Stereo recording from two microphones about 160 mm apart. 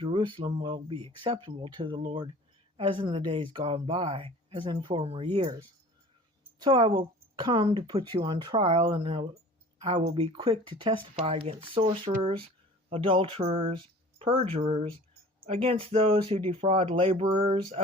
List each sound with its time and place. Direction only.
0.0 s speech: 30° right (ahead or behind)
6.6 s speech: 30° right (ahead or behind)
9.9 s speech: 40° right (ahead or behind)